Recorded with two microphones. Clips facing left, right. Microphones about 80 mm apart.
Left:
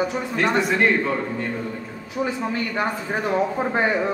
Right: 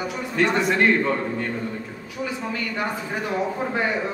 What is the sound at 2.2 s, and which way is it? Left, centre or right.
A man's voice, left.